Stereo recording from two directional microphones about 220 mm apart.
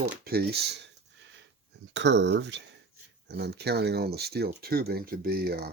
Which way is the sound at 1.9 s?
55° right (ahead or behind).